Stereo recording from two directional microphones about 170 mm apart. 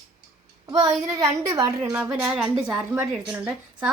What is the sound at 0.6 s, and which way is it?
A woman's voice, 25° right (ahead or behind).